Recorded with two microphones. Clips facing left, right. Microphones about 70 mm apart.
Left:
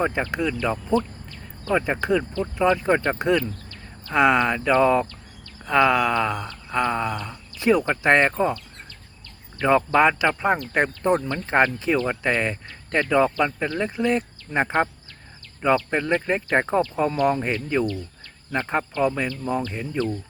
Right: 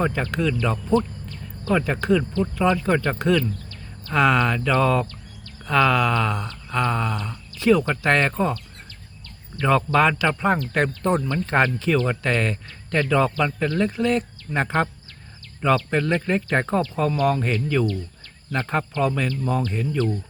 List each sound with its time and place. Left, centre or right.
0.0 s speech: centre
9.6 s speech: centre